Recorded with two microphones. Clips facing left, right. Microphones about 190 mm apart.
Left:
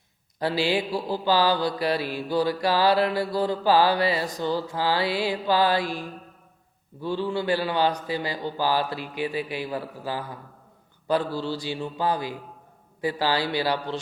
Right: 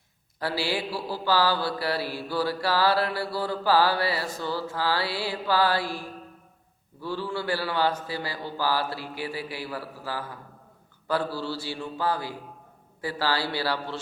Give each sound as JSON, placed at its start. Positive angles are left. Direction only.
{"t": 0.3, "sound": "mantra", "side_deg": 20}
{"t": 7.0, "sound": "speech", "side_deg": 20}
{"t": 11.1, "sound": "mantra", "side_deg": 20}